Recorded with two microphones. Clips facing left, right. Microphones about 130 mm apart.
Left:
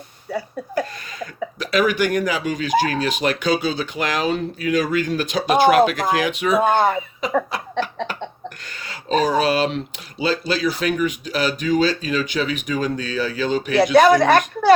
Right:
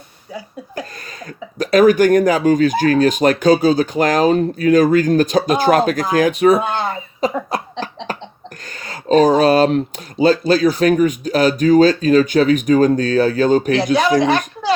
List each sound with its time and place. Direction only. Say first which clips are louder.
1.5 s speech: right 8 dB; 45° right (ahead or behind)
6.6 s speech: left 4 dB; 50° left (ahead or behind)
7.2 s cough: right 3 dB; 35° right (ahead or behind)
8.8 s speech: right 7 dB; 40° right (ahead or behind)
13.9 s speech: left 3 dB; 55° left (ahead or behind)